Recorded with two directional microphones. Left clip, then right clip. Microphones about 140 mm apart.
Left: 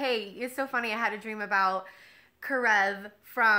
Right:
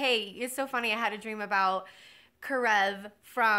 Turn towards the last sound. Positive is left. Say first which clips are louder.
# left 2 dB
turn(degrees=-25)  # may be behind; listen again after turning